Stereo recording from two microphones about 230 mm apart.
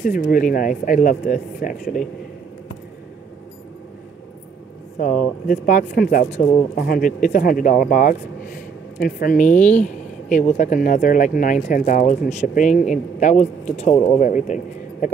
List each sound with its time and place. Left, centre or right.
0.0 s speech: left
4.9 s speech: left
9.4 s speech: centre
9.8 s speech: left